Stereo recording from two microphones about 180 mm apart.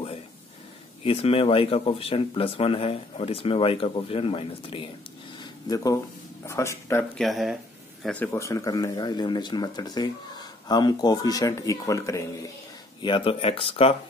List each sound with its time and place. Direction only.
1.0 s speech: 30° left (ahead or behind)
5.4 s a sound: 20° left (ahead or behind)
6.4 s speech: 15° left (ahead or behind)
7.2 s speech: centre (ahead or behind); by 12.3 s 15° left (ahead or behind)
13.0 s speech: 30° left (ahead or behind)